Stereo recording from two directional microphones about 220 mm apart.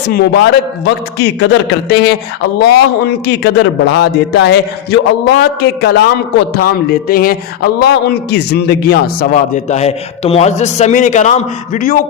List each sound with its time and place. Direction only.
0.1 s a man's voice: 50° left (ahead or behind)
9.6 s a man's voice: 30° left (ahead or behind)